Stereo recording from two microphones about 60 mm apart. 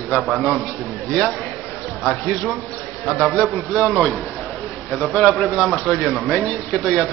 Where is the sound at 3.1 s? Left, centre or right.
Centre.